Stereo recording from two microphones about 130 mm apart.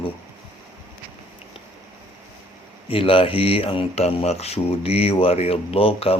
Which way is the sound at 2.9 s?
45° left (ahead or behind).